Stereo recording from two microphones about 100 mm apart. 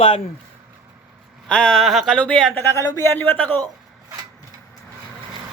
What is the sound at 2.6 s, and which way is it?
Speech, 20° left (ahead or behind).